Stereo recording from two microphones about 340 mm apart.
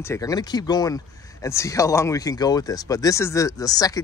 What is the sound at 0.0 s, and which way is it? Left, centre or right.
Speech, centre.